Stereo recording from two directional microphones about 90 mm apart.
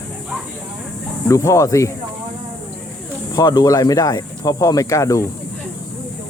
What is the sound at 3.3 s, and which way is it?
Speech, 45° left (ahead or behind).